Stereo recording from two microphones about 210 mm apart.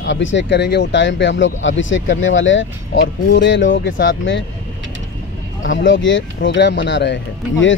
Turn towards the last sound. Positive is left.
turn(degrees=60)  # may be behind; listen again after turning